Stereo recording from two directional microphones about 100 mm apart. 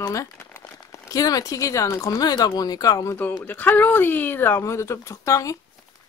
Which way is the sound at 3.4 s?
20° left (ahead or behind).